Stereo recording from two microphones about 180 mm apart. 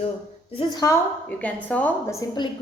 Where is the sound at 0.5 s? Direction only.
20° left (ahead or behind).